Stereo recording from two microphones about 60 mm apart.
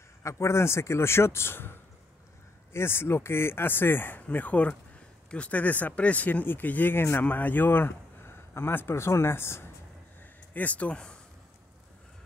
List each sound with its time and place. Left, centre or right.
0.2 s speech: left
10.5 s speech: left